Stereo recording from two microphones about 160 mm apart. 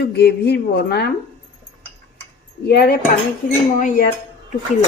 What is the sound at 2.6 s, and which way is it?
Speech, 75° left (ahead or behind).